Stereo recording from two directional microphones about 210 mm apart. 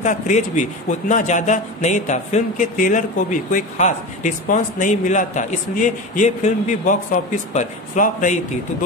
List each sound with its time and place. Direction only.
0.0 s a man's voice: 35° left (ahead or behind)